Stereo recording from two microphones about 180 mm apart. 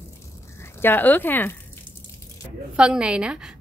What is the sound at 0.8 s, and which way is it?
Speech, 10° left (ahead or behind).